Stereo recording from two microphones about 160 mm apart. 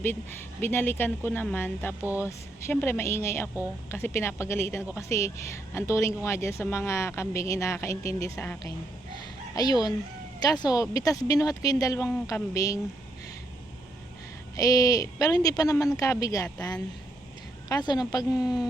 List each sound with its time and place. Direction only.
0.0 s speech: 15° left (ahead or behind)
10.4 s speech: 25° left (ahead or behind)
14.5 s speech: 20° left (ahead or behind)